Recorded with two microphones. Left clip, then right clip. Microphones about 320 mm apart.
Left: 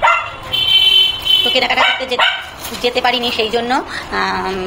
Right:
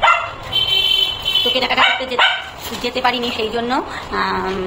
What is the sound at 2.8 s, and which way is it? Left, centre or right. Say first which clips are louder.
A woman's voice: left 3 dB; centre.